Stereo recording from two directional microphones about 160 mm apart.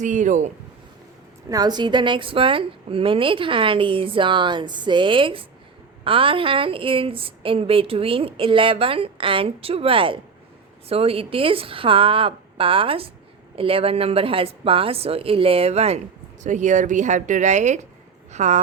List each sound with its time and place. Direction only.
0.0 s speech: 50° right (ahead or behind)
1.5 s speech: 25° right (ahead or behind); by 18.6 s 45° right (ahead or behind)